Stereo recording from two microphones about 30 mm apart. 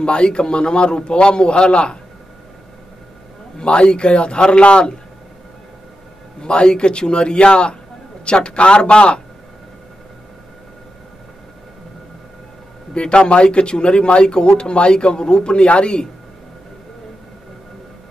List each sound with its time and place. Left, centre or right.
0.0 s a man's voice: left
3.5 s a man's voice: left
6.4 s a man's voice: left
12.9 s a man's voice: left